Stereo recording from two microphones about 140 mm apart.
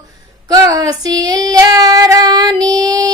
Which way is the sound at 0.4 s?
30° right (ahead or behind).